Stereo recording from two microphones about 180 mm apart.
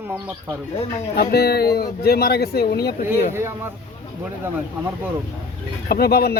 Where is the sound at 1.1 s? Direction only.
60° left (ahead or behind).